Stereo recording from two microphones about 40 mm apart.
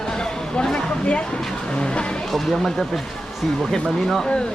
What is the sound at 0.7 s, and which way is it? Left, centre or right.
Speech, left.